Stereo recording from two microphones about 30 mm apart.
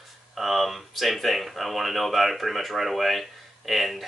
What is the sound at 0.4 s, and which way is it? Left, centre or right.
Speech, centre.